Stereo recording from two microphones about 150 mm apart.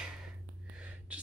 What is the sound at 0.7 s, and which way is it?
Whispering, 10° right (ahead or behind).